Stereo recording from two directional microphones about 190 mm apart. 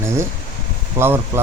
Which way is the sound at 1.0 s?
15° right (ahead or behind).